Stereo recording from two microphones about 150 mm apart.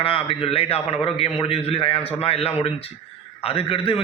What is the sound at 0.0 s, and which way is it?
A man's voice, 40° left (ahead or behind).